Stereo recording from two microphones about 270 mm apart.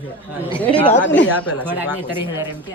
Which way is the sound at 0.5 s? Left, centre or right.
Centre.